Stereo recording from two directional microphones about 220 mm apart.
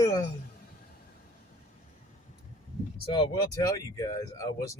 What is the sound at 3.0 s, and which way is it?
Speech, 20° left (ahead or behind).